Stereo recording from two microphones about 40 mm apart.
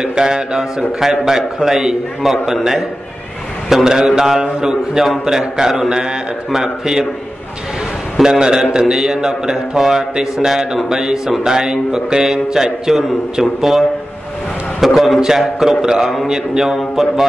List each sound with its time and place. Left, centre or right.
0.0 s a man's voice: centre
8.2 s a man's voice: centre